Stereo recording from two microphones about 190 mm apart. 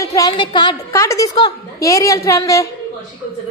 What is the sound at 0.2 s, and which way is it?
A woman's voice, 25° left (ahead or behind).